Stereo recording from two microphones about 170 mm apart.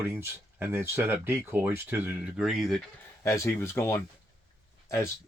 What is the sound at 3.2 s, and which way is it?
Speech, 15° left (ahead or behind).